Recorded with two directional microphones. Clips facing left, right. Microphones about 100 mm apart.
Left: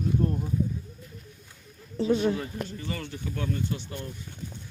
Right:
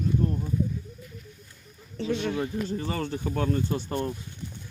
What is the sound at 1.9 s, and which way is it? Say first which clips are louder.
Speech: left 4 dB; 35° left (ahead or behind).